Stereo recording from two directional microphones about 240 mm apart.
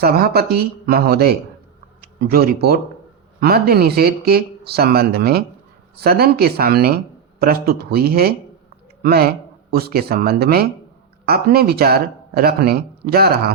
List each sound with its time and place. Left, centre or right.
0.0 s speech: right